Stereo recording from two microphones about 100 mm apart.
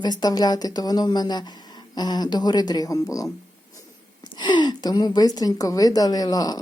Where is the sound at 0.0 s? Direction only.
45° left (ahead or behind).